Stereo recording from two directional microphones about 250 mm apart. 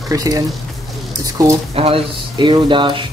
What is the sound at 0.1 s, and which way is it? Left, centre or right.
Speech, centre.